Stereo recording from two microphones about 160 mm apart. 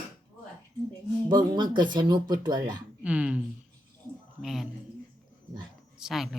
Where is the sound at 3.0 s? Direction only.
5° right (ahead or behind).